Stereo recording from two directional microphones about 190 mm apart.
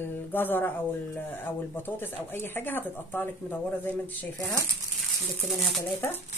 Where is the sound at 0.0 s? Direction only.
10° left (ahead or behind).